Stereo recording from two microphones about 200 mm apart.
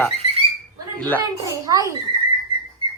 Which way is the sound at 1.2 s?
20° right (ahead or behind).